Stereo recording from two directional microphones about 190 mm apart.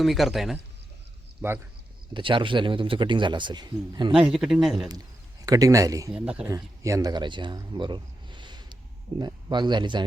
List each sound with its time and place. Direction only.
0.0 s a man's voice: centre (ahead or behind)
1.4 s speech: 10° right (ahead or behind)
2.1 s speech: 25° right (ahead or behind)
4.1 s a man's voice: 5° right (ahead or behind)
5.5 s speech: 20° right (ahead or behind)
6.1 s a man's voice: 5° right (ahead or behind)
6.5 s speech: 15° right (ahead or behind)